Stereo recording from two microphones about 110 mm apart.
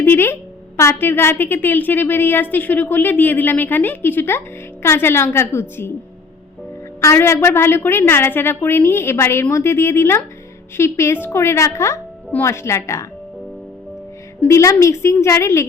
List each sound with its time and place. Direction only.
0.0 s a woman's voice: 20° left (ahead or behind)
7.0 s a woman's voice: 25° left (ahead or behind)
14.4 s a woman's voice: 25° left (ahead or behind)